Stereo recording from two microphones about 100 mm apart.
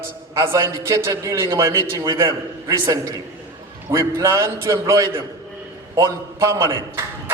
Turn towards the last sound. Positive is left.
turn(degrees=-30)  # may be behind; listen again after turning